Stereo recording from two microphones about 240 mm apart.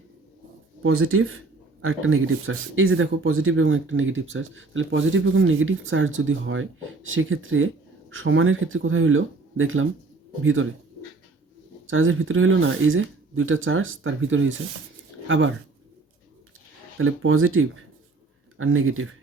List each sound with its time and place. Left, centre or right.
0.8 s speech: right
11.9 s speech: right
17.0 s speech: right